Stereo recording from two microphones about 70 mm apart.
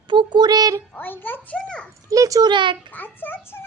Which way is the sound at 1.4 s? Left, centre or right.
Centre.